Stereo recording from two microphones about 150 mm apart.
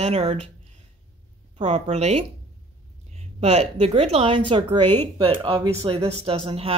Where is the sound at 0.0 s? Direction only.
40° right (ahead or behind).